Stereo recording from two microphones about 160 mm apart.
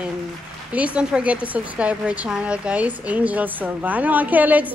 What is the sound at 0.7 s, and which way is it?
A woman's voice, 10° right (ahead or behind).